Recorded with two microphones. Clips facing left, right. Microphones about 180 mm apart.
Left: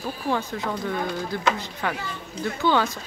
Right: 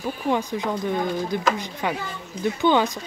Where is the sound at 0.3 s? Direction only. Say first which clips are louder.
Right 3 dB; 15° right (ahead or behind).